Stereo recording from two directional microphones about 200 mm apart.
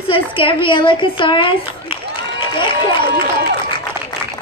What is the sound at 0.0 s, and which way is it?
A woman's voice, 25° left (ahead or behind).